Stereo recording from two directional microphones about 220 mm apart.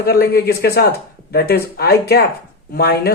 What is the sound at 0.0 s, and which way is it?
Speech, 45° left (ahead or behind).